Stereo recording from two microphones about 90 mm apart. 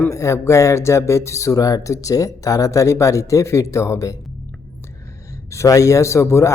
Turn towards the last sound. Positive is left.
turn(degrees=30)  # may be behind; listen again after turning